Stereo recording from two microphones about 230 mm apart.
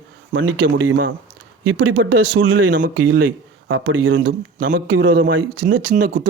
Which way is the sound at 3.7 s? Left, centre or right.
Right.